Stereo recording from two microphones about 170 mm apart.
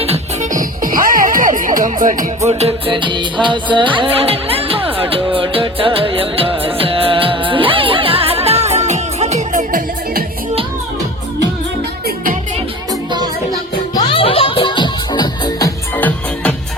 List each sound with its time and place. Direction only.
0.5 s music: 55° right (ahead or behind)
2.5 s music: 35° right (ahead or behind)
12.0 s music: 55° right (ahead or behind)
12.9 s music: 25° right (ahead or behind)
13.9 s music: 30° left (ahead or behind)
16.0 s music: 10° left (ahead or behind)